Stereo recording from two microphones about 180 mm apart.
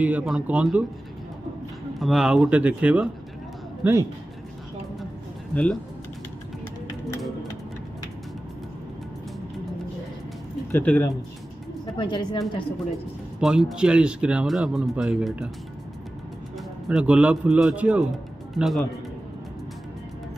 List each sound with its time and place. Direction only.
0.0 s a man's voice: 5° right (ahead or behind)
2.0 s a man's voice: centre (ahead or behind)
5.5 s speech: 5° left (ahead or behind)
10.7 s speech: 10° left (ahead or behind)
11.8 s a woman's voice: 25° left (ahead or behind)
13.4 s speech: centre (ahead or behind)
16.9 s a man's voice: 5° right (ahead or behind)